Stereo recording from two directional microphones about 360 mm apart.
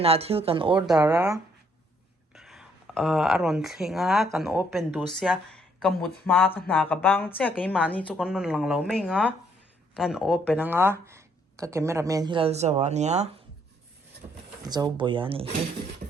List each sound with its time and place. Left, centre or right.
0.0 s speech: centre
14.6 s speech: centre